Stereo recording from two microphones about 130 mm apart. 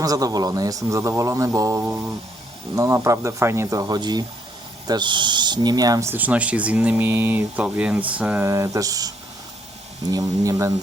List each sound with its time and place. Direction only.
0.0 s a man's voice: 30° right (ahead or behind); by 8.4 s 10° right (ahead or behind)
8.4 s a man's voice: 25° right (ahead or behind)